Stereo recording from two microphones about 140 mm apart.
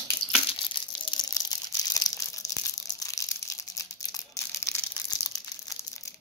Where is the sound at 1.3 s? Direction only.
25° left (ahead or behind).